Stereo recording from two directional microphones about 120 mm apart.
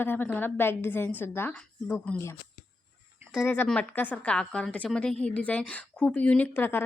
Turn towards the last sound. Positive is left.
turn(degrees=20)  # may be behind; listen again after turning